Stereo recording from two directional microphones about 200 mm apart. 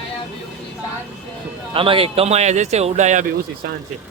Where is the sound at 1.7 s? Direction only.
25° right (ahead or behind).